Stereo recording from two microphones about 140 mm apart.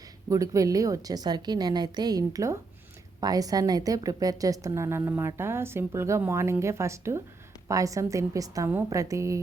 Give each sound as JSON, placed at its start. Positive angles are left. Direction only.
{"t": 0.3, "sound": "a woman's voice", "side_deg": -25}